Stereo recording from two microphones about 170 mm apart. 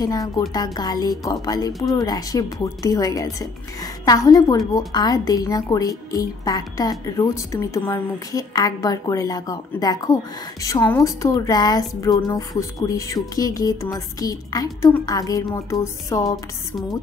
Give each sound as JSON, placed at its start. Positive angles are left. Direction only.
{"t": 0.0, "sound": "a woman's voice", "side_deg": 20}